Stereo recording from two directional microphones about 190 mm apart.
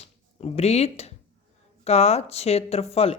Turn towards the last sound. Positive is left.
turn(degrees=30)  # may be behind; listen again after turning